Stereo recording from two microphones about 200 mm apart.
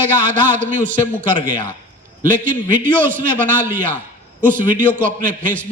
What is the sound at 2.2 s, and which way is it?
Speech, 40° right (ahead or behind).